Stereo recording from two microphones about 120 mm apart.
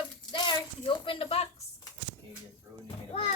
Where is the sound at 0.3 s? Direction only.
40° left (ahead or behind).